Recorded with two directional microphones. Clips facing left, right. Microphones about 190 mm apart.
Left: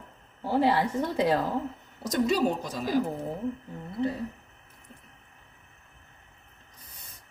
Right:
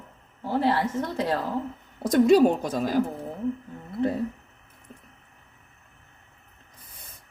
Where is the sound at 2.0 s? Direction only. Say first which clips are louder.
Right 8 dB; 55° right (ahead or behind).